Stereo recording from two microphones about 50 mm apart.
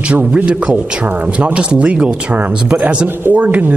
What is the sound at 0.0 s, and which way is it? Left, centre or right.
Speech, right.